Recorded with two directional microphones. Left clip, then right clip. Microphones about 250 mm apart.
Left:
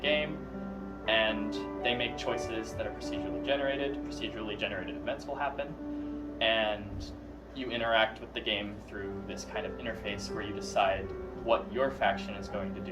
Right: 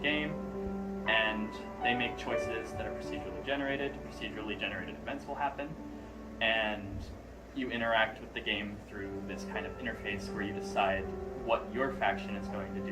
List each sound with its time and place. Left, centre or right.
0.0 s music: centre
3.4 s speech: centre
10.8 s speech: centre